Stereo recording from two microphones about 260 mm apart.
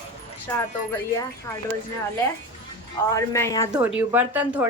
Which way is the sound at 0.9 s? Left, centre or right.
Centre.